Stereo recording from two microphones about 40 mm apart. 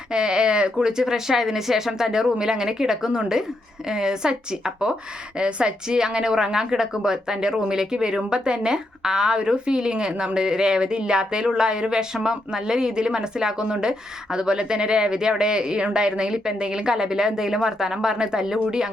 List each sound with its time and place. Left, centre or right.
0.1 s a woman's voice: right